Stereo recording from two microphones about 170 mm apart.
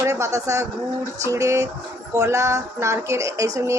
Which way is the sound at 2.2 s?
20° right (ahead or behind).